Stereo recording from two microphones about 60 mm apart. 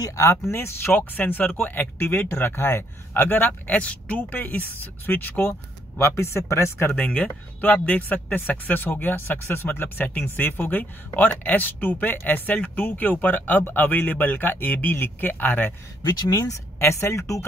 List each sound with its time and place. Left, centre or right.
0.2 s speech: left
5.9 s speech: left
7.0 s speech: left
16.3 s speech: left
16.8 s speech: left